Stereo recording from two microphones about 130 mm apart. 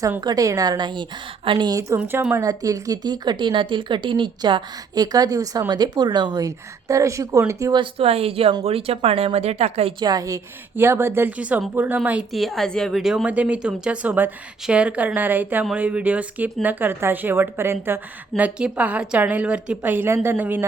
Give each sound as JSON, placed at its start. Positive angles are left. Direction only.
{"t": 0.2, "sound": "speech", "side_deg": -30}
{"t": 2.0, "sound": "speech", "side_deg": -15}
{"t": 2.3, "sound": "speech", "side_deg": -25}
{"t": 7.8, "sound": "speech", "side_deg": -50}
{"t": 10.0, "sound": "speech", "side_deg": -30}
{"t": 12.4, "sound": "speech", "side_deg": 0}